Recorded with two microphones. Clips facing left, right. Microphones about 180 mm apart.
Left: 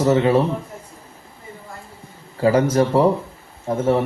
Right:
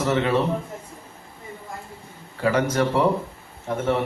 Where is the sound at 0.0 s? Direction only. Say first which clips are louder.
Left 5 dB; 30° left (ahead or behind).